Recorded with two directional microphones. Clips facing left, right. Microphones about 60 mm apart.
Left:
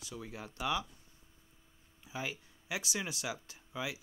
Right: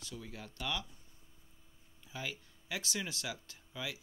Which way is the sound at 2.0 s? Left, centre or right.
Centre.